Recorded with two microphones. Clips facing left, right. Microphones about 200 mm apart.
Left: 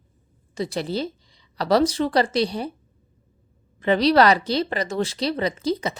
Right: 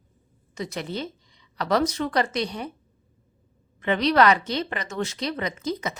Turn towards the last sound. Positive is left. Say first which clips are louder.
# left 5 dB
turn(degrees=30)  # may be behind; listen again after turning